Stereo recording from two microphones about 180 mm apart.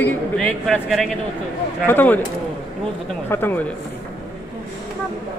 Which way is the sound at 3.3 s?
10° left (ahead or behind).